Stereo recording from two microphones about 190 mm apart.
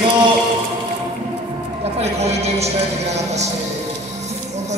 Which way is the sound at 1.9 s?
35° right (ahead or behind).